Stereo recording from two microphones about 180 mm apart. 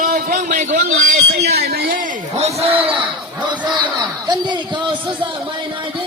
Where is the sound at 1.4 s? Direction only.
60° right (ahead or behind).